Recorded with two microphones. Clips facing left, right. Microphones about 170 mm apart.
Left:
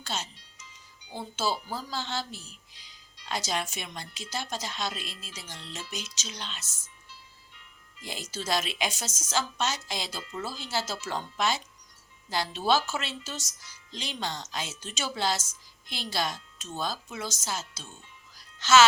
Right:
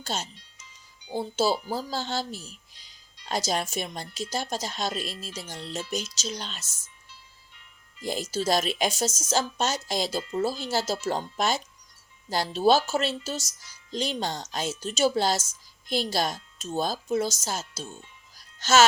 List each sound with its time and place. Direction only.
0.0 s speech: 40° right (ahead or behind)
8.0 s a woman's voice: 40° right (ahead or behind)
18.3 s music: 45° right (ahead or behind)